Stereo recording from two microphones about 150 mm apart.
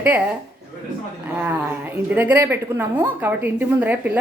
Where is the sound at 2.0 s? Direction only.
10° right (ahead or behind).